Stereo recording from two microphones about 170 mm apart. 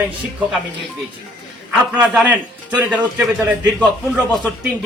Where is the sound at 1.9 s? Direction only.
5° right (ahead or behind).